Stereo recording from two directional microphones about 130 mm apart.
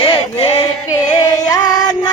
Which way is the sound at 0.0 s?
40° left (ahead or behind).